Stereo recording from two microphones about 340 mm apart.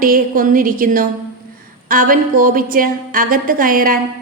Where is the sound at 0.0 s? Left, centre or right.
Right.